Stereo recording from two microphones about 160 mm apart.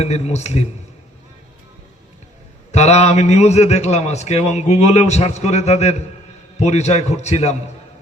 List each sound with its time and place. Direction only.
0.0 s a man's voice: 45° left (ahead or behind)
2.7 s a man's voice: 45° left (ahead or behind)